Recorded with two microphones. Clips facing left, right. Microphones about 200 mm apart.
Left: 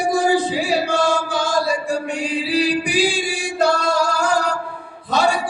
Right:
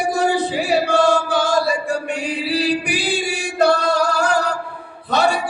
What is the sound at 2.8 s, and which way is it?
Music, 60° right (ahead or behind).